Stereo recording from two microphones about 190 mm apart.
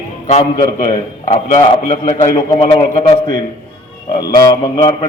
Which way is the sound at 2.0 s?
20° left (ahead or behind).